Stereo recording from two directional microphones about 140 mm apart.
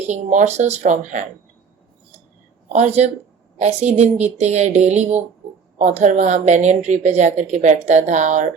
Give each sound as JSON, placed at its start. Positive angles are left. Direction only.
{"t": 0.1, "sound": "speech", "side_deg": -55}
{"t": 2.7, "sound": "a woman's voice", "side_deg": -55}